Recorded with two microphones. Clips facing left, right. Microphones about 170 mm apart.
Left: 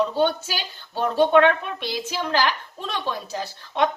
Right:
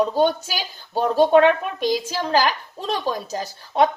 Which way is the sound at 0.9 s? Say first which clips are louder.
Right 2 dB; 40° right (ahead or behind).